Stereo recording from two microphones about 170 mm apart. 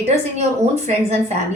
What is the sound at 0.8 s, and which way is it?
Speech, 40° right (ahead or behind).